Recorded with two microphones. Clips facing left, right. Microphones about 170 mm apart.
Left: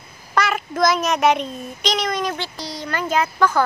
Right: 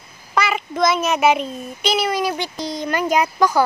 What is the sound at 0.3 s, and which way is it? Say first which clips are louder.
A child's voice: even; centre (ahead or behind).